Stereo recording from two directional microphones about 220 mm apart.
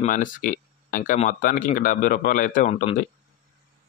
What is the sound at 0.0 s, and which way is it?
Speech, 35° left (ahead or behind).